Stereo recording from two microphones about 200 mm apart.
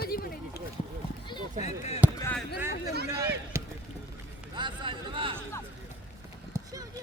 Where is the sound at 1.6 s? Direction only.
35° left (ahead or behind).